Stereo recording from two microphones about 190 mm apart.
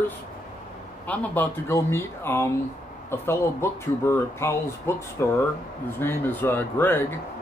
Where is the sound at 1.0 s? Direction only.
10° left (ahead or behind).